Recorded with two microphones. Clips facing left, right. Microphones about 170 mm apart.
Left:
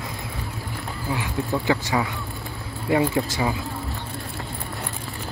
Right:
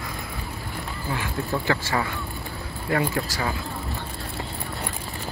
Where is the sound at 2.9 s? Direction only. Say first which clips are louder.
Left 4 dB; 20° left (ahead or behind).